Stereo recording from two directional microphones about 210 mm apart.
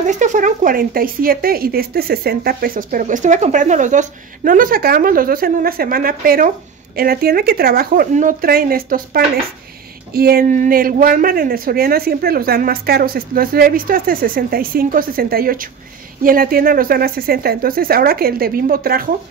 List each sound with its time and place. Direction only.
0.0 s speech: 35° right (ahead or behind)